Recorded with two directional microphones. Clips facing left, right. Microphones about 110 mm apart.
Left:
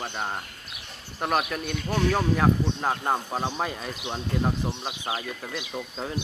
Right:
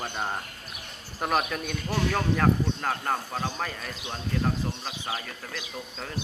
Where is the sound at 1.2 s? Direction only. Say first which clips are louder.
Left 1 dB; centre (ahead or behind).